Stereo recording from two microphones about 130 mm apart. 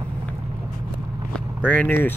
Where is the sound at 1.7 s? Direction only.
15° left (ahead or behind).